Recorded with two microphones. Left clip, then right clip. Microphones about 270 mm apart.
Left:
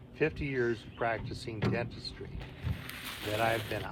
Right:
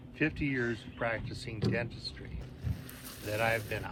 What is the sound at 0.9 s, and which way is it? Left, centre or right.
Speech, centre.